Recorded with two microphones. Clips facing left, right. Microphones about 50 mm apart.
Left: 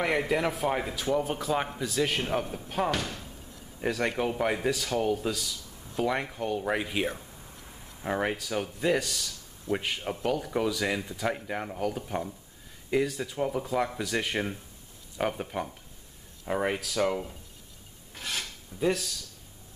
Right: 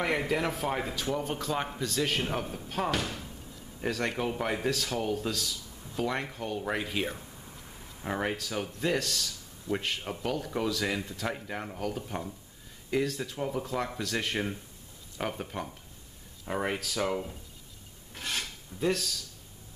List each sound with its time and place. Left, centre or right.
0.0 s a man's voice: centre
18.1 s filing: centre